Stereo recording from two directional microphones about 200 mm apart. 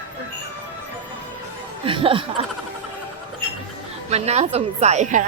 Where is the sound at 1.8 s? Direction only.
25° right (ahead or behind).